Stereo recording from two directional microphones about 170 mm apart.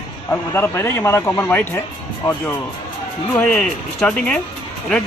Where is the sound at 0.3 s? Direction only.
10° left (ahead or behind).